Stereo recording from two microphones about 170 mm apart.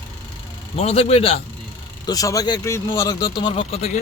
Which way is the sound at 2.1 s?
20° left (ahead or behind).